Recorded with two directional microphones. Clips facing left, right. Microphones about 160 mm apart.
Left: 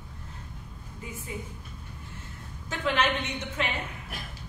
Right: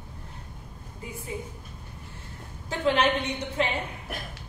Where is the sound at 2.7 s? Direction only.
35° right (ahead or behind).